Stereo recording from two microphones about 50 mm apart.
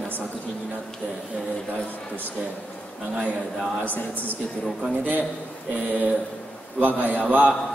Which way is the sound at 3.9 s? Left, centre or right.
Left.